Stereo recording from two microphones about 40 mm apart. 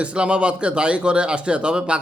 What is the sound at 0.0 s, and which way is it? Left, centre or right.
A man's voice, right.